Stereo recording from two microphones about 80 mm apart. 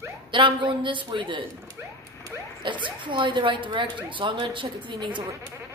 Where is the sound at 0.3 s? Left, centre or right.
Right.